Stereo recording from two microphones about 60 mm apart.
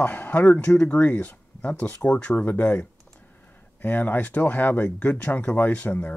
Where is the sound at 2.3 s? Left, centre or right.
Left.